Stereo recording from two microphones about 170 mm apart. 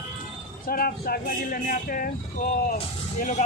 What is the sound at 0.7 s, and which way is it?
Speech, 60° left (ahead or behind).